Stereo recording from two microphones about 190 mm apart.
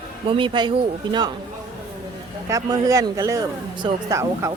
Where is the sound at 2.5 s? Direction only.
20° right (ahead or behind).